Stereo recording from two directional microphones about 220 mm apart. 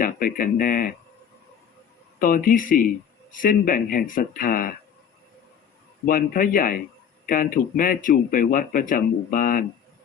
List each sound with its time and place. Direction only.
0.0 s speech: 40° left (ahead or behind)
2.1 s speech: 40° left (ahead or behind)
6.1 s speech: 40° left (ahead or behind)